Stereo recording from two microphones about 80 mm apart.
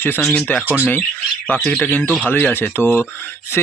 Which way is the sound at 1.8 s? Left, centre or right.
Left.